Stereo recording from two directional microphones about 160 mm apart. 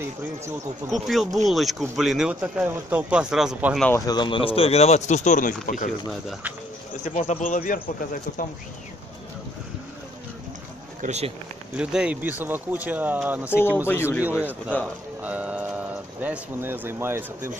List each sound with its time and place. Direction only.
0.8 s speech: centre (ahead or behind)
3.9 s speech: 25° left (ahead or behind); by 5.9 s 55° left (ahead or behind)
7.1 s speech: 50° left (ahead or behind)
11.0 s speech: 45° right (ahead or behind)
11.7 s speech: 5° right (ahead or behind)
14.3 s speech: 10° left (ahead or behind)
15.2 s speech: 10° right (ahead or behind)